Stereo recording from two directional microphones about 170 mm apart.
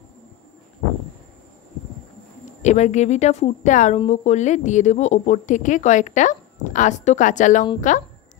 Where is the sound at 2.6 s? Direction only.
45° left (ahead or behind).